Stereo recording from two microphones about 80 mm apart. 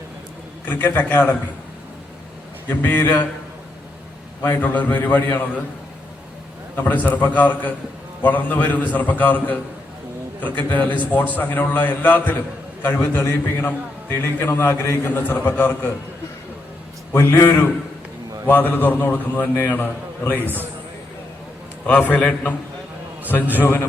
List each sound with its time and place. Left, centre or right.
0.6 s a man's voice: left
2.6 s a man's voice: left
4.4 s a man's voice: left
6.7 s a man's voice: left
17.1 s a man's voice: left
21.8 s a man's voice: centre
23.6 s a man's voice: left